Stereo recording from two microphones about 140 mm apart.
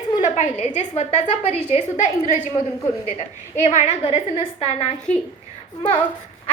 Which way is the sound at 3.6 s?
55° left (ahead or behind).